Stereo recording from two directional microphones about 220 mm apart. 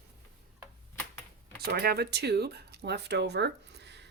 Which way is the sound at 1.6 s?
45° right (ahead or behind).